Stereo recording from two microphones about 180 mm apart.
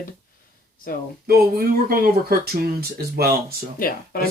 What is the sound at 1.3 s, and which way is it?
Speech, 55° right (ahead or behind).